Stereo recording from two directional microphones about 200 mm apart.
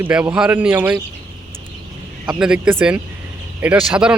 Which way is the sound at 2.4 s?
5° right (ahead or behind).